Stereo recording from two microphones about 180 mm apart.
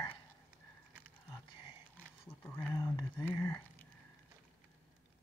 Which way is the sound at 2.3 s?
15° left (ahead or behind).